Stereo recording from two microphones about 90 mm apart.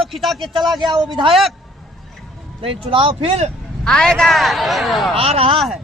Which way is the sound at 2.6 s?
80° right.